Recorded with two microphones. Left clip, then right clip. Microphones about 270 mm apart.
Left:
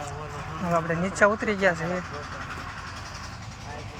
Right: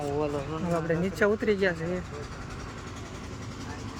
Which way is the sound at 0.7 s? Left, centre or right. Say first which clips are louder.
Left 3 dB; centre.